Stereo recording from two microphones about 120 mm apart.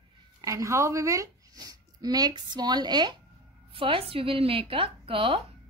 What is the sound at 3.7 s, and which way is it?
A woman's voice, 50° right (ahead or behind).